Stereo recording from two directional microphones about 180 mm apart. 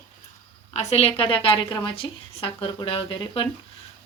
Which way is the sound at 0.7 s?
35° left (ahead or behind).